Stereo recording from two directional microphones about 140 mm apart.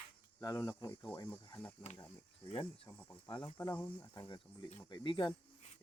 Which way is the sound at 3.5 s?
15° left (ahead or behind).